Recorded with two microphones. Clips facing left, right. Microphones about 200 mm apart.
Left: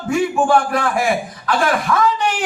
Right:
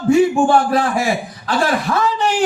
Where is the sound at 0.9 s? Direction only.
55° left (ahead or behind).